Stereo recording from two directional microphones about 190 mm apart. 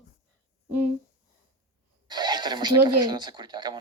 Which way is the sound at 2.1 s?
20° right (ahead or behind).